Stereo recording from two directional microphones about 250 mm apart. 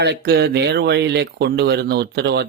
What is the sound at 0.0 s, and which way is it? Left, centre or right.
Speech, right.